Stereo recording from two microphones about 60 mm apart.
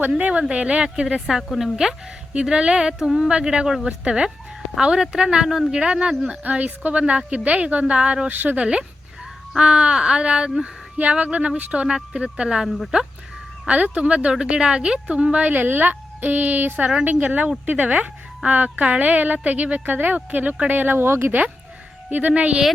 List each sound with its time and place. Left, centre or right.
0.1 s a woman's voice: centre
1.0 s speech: centre
6.4 s a woman's voice: right
8.3 s speech: right
9.6 s speech: centre
10.9 s a woman's voice: right
12.6 s speech: centre
13.7 s a woman's voice: right
22.1 s a woman's voice: right